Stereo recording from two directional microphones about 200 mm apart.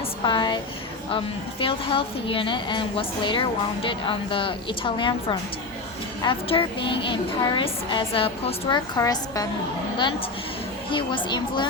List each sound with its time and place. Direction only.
0.3 s a woman's voice: 25° left (ahead or behind)
10.9 s a woman's voice: 25° left (ahead or behind)